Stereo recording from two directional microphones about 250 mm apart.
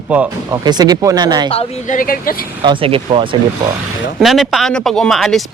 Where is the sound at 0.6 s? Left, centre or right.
Centre.